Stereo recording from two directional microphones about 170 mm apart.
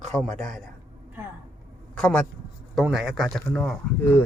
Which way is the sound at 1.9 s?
5° left (ahead or behind).